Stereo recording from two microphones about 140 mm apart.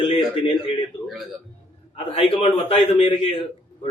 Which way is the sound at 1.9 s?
40° left (ahead or behind).